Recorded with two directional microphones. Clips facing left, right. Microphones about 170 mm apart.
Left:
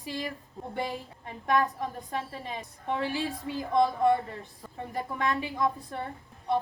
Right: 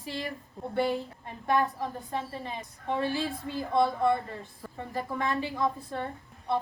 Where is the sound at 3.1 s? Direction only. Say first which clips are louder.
Right 1 dB; 15° left (ahead or behind).